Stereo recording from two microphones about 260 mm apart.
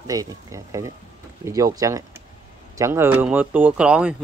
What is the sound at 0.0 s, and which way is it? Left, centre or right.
Speech, centre.